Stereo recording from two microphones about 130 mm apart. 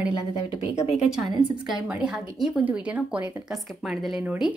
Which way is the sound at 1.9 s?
5° right (ahead or behind).